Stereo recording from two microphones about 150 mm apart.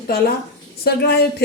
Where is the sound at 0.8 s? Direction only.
90° left.